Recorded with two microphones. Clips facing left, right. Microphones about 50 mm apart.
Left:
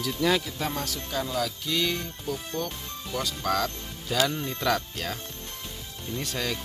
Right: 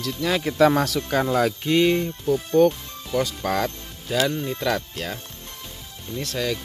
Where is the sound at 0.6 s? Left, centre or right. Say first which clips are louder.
Right 13 dB; right.